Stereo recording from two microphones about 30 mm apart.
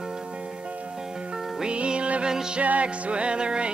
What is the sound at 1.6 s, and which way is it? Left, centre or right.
Music, right.